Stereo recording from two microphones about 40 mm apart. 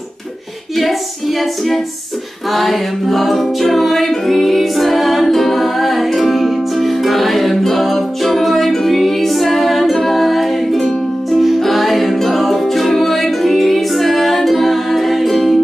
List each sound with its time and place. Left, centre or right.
1.4 s music: centre